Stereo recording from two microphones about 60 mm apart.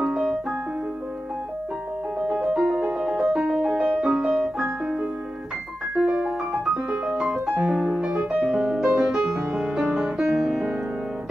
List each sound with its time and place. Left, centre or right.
0.0 s music: centre
2.2 s music: centre
6.0 s piano: centre
7.3 s piano: centre
7.6 s music: centre